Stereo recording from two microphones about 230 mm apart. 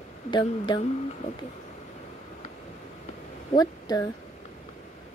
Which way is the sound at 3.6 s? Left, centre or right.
Centre.